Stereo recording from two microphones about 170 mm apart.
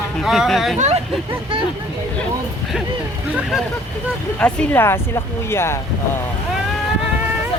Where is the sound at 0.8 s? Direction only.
40° right (ahead or behind).